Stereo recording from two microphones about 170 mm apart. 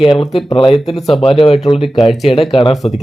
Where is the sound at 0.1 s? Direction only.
30° left (ahead or behind).